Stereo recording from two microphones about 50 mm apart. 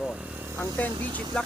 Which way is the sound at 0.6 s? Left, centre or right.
Left.